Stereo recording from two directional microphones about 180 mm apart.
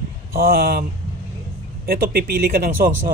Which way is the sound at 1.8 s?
55° right (ahead or behind).